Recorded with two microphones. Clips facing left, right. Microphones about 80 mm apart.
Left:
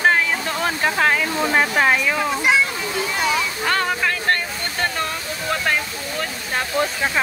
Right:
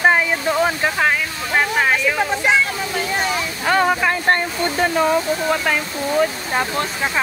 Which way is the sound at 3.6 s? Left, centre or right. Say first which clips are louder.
Right 7 dB; centre.